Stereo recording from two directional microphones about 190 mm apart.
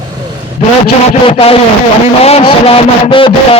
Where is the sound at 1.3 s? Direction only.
30° left (ahead or behind).